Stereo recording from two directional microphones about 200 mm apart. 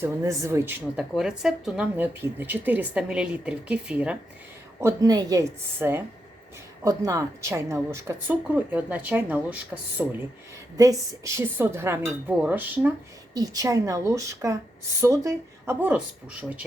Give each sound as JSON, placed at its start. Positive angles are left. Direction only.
{"t": 0.0, "sound": "a woman's voice", "side_deg": -15}